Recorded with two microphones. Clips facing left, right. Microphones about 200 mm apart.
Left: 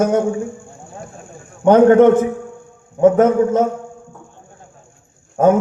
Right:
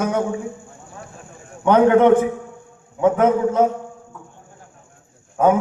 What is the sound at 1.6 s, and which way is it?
A man's voice, 45° left (ahead or behind).